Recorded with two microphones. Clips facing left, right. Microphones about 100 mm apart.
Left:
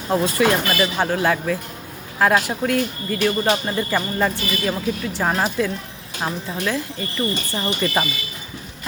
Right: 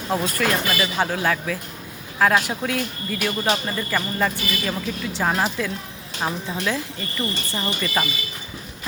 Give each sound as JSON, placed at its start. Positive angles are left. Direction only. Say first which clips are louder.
{"t": 0.1, "sound": "speech", "louder": "left 4 dB", "side_deg": 5}
{"t": 3.7, "sound": "speech", "louder": "left 3 dB", "side_deg": 20}
{"t": 4.2, "sound": "speech", "louder": "left 2 dB", "side_deg": 10}
{"t": 7.7, "sound": "speech", "louder": "left 4 dB", "side_deg": 20}